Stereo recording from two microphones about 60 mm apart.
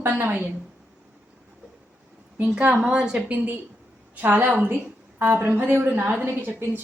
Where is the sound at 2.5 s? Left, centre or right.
Centre.